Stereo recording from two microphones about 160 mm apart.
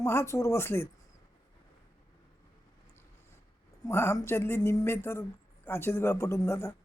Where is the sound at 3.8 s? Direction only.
15° left (ahead or behind).